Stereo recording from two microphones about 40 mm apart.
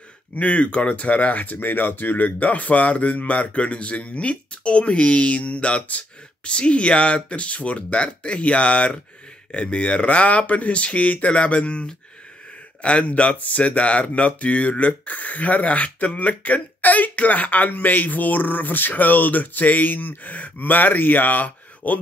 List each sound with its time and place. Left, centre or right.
0.4 s speech: left